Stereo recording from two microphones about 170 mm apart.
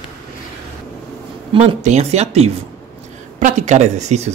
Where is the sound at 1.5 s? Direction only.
35° right (ahead or behind).